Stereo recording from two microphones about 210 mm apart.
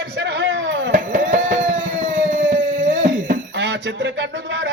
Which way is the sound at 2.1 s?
40° right (ahead or behind).